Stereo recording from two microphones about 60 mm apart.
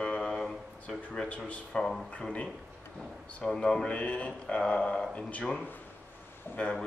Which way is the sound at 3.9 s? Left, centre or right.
Left.